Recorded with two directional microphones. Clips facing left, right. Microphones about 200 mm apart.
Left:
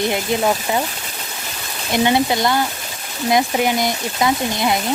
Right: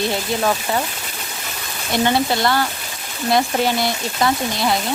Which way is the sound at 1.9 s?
15° left (ahead or behind).